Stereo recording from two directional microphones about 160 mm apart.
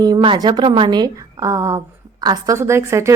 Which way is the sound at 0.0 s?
25° right (ahead or behind).